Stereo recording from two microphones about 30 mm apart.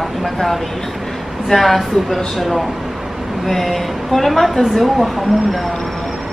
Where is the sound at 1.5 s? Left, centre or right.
Centre.